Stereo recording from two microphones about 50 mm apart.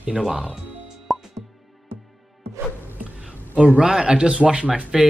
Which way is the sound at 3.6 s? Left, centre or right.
Centre.